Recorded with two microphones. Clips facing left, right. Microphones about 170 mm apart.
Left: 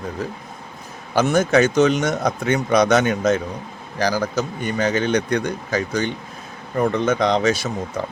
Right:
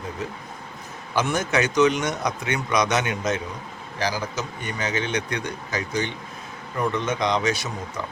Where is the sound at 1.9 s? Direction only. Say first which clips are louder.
Left 5 dB; 50° left (ahead or behind).